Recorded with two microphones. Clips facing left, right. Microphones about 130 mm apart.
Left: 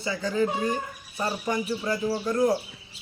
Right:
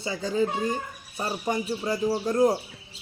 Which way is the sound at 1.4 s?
25° right (ahead or behind).